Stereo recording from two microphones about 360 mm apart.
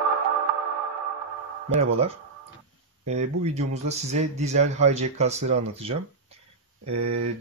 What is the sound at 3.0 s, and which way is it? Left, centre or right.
A man's voice, centre.